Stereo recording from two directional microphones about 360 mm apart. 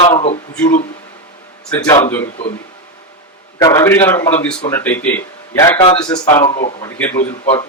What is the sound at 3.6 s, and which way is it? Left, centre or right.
A man's voice, centre.